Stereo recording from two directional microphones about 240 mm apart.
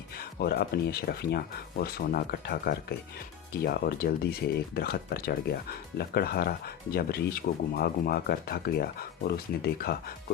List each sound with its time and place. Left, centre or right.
0.3 s speech: left